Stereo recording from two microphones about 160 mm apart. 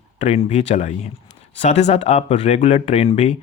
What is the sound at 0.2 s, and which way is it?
Speech, 40° left (ahead or behind).